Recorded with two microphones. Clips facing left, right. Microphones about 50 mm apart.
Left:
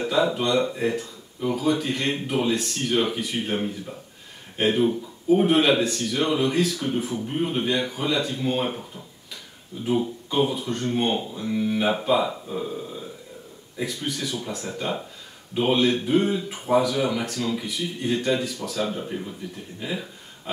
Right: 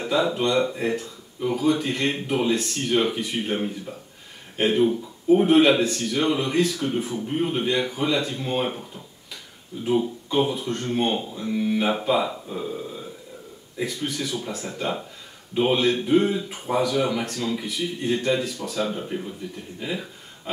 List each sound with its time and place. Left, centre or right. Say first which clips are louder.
0.0 s a sound: left 1 dB; centre
0.3 s speech: right 1 dB; centre
9.9 s speech: right 1 dB; centre